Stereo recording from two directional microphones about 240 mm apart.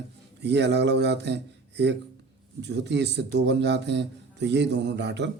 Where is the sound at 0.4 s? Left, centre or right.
Right.